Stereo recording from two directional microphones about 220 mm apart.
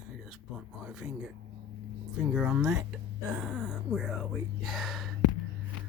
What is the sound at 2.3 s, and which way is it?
Speech, 5° right (ahead or behind).